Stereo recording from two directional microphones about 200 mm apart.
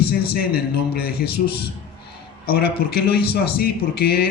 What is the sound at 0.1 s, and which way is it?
A man's voice, 50° left (ahead or behind).